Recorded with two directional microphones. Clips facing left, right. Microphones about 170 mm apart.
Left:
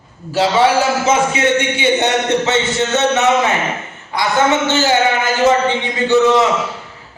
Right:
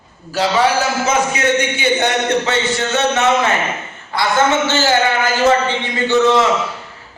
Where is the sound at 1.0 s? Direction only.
25° left (ahead or behind).